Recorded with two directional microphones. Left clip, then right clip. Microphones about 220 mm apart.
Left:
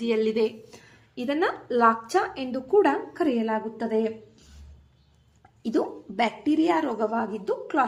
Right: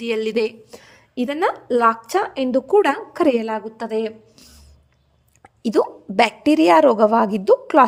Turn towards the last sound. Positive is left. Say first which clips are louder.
# right 12 dB
turn(degrees=-50)  # may be behind; listen again after turning